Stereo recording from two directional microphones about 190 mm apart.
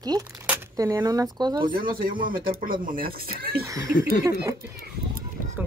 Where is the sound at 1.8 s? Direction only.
50° right (ahead or behind).